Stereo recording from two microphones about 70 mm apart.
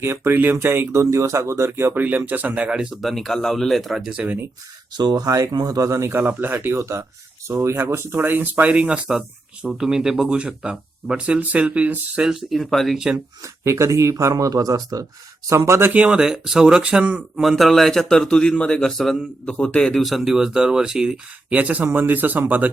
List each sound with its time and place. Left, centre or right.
0.0 s speech: right
0.9 s speech: right
1.9 s speech: right
3.0 s a man's voice: centre
4.9 s speech: right
5.2 s speech: right
6.4 s speech: right
6.7 s speech: right
8.7 s speech: centre
13.4 s speech: right
15.4 s speech: right
15.9 s speech: centre
17.4 s a man's voice: centre
21.5 s speech: right